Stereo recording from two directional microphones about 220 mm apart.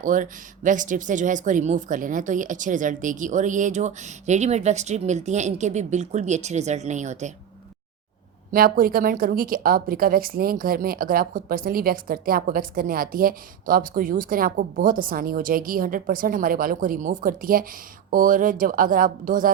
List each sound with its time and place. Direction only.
0.0 s a woman's voice: 35° right (ahead or behind)
8.5 s a woman's voice: 40° right (ahead or behind)